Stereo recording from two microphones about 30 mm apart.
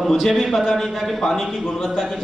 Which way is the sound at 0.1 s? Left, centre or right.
Centre.